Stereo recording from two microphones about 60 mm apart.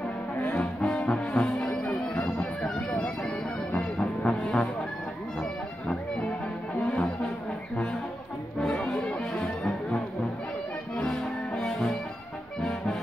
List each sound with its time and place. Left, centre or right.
0.4 s brass instrument: left
2.1 s music: left
2.9 s bagpipes: centre
3.7 s music: centre
11.0 s music: centre